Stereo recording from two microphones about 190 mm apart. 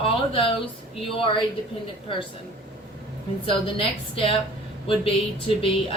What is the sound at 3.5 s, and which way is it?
Speech, 30° left (ahead or behind).